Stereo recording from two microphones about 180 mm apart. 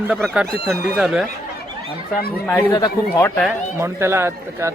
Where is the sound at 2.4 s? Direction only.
10° left (ahead or behind).